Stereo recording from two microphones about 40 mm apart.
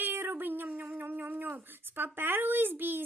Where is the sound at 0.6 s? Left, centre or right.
Right.